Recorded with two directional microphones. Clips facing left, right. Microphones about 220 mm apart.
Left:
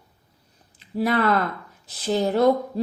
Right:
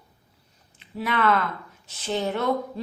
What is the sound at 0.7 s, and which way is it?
A woman's voice, 40° left (ahead or behind).